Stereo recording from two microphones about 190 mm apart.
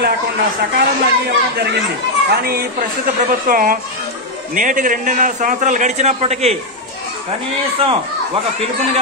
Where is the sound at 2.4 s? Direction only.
50° right (ahead or behind); by 6.6 s 35° right (ahead or behind).